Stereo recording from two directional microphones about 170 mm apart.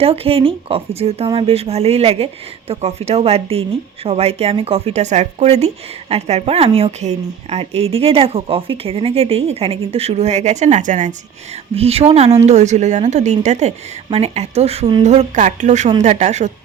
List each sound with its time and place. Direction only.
0.0 s speech: 35° right (ahead or behind)
11.7 s speech: 35° right (ahead or behind)
15.0 s a woman's voice: 40° right (ahead or behind)